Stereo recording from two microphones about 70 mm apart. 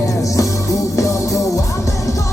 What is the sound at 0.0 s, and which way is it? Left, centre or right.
Music, left.